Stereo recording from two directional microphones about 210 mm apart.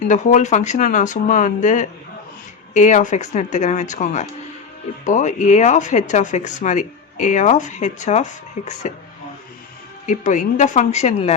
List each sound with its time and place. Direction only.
0.1 s speech: 35° left (ahead or behind)
10.1 s speech: 35° left (ahead or behind)